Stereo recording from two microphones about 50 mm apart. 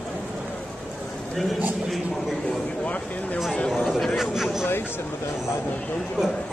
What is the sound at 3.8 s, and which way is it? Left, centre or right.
Speech, centre.